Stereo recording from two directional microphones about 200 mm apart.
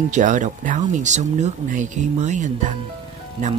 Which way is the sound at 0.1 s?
40° right (ahead or behind).